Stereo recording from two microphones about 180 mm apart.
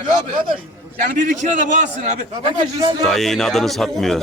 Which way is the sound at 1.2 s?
45° right (ahead or behind).